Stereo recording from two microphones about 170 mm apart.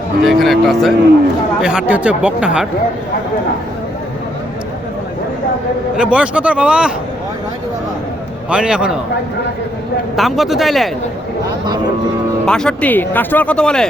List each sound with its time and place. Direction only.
0.2 s speech: centre (ahead or behind)
6.0 s speech: 5° right (ahead or behind)
8.4 s speech: 5° right (ahead or behind)
10.2 s speech: centre (ahead or behind)
12.5 s speech: 5° left (ahead or behind)